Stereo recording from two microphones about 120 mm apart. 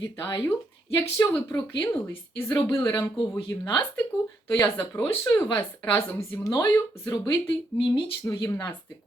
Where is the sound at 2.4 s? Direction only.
25° left (ahead or behind).